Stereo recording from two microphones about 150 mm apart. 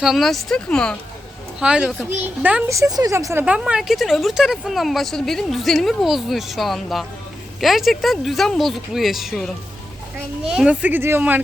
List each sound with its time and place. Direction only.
0.0 s speech: centre (ahead or behind)
1.5 s speech: 5° right (ahead or behind)
2.7 s a woman's voice: 25° right (ahead or behind)
3.4 s speech: 10° right (ahead or behind)